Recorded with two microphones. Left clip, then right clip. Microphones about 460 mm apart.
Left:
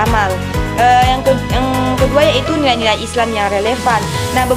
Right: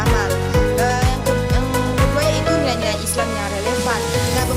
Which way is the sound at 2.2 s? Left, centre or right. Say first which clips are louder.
Left 6 dB; right.